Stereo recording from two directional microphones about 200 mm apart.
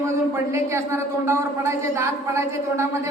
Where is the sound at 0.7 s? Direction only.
15° right (ahead or behind).